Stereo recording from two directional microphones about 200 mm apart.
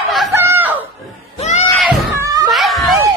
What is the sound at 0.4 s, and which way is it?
Chicken, 10° right (ahead or behind).